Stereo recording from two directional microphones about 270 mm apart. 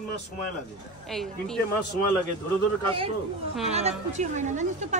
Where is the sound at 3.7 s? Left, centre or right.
Right.